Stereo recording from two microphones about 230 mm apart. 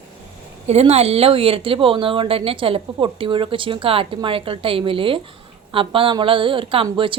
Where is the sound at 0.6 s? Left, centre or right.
Right.